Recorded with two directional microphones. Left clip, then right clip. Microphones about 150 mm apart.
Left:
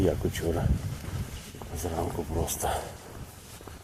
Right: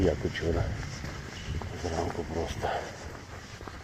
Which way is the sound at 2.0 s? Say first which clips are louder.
Left 1 dB; 30° left (ahead or behind).